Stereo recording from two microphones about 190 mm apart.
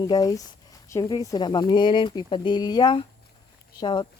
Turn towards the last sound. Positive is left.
turn(degrees=25)  # may be behind; listen again after turning